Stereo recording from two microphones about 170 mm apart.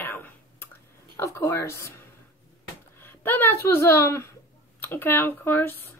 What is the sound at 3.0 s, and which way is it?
A woman's voice, 10° left (ahead or behind).